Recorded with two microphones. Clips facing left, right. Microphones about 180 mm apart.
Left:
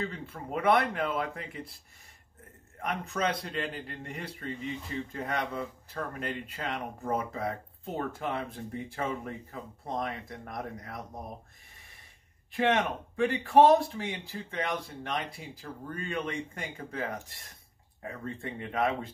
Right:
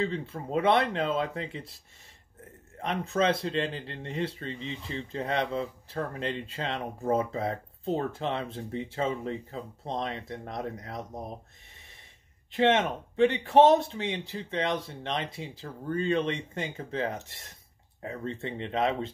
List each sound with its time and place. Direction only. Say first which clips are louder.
0.0 s speech: right 6 dB; 25° right (ahead or behind)
2.8 s speech: right 4 dB; 25° right (ahead or behind)
12.4 s speech: right 3 dB; 25° right (ahead or behind)